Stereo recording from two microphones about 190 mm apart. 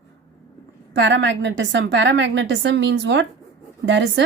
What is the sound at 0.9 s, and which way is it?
Speech, 70° right (ahead or behind).